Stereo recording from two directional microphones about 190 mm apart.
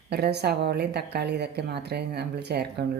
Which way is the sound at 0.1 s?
60° right (ahead or behind).